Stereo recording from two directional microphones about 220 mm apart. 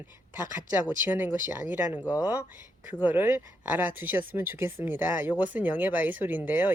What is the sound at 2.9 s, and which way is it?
Speech, 10° right (ahead or behind).